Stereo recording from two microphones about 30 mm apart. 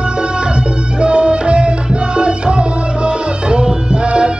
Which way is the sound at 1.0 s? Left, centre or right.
Right.